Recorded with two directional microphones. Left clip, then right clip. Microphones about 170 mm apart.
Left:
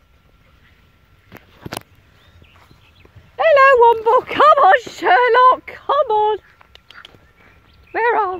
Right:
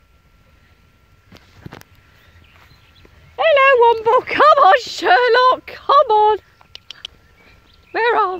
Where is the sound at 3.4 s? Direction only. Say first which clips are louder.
Left 1 dB; 20° left (ahead or behind).